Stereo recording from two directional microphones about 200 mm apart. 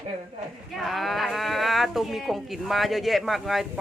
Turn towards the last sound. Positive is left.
turn(degrees=0)  # may be behind; listen again after turning